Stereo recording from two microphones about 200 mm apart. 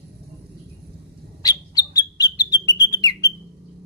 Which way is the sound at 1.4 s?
20° left (ahead or behind).